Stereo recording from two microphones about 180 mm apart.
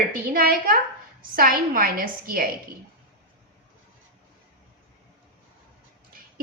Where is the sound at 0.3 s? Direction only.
55° right (ahead or behind).